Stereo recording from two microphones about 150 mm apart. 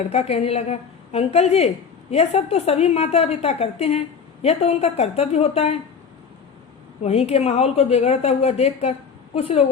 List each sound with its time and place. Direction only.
0.1 s a woman's voice: 45° left (ahead or behind)
7.0 s a woman's voice: 45° left (ahead or behind)